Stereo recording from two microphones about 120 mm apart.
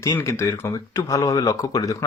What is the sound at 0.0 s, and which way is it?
Speech, 25° left (ahead or behind).